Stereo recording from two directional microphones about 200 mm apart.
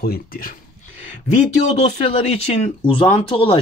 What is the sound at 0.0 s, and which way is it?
Speech, 45° left (ahead or behind).